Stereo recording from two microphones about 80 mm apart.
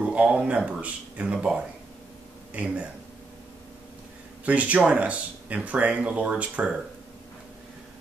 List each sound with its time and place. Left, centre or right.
0.0 s speech: centre
4.5 s speech: centre